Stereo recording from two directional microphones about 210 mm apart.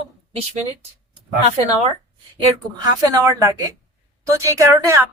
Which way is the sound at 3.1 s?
15° right (ahead or behind).